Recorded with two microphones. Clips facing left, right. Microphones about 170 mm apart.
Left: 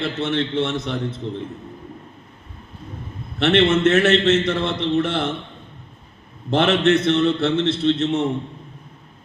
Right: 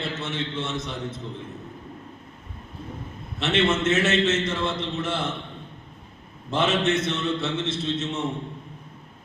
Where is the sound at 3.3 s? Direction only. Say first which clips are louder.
Left 6 dB; 60° left (ahead or behind).